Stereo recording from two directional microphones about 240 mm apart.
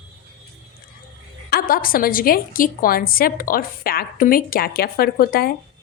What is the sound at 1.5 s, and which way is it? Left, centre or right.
A woman's voice, left.